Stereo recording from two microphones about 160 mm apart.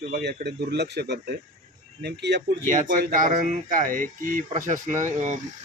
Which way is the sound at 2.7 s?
55° right (ahead or behind).